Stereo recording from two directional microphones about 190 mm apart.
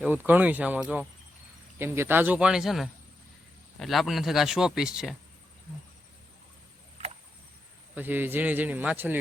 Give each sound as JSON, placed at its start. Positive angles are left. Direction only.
{"t": 0.0, "sound": "a man's voice", "side_deg": -10}
{"t": 7.9, "sound": "a man's voice", "side_deg": -10}